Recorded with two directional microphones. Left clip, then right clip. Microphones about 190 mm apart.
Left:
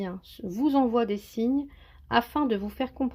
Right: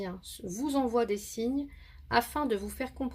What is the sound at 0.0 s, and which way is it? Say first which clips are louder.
Speech: left 3 dB; 30° left (ahead or behind).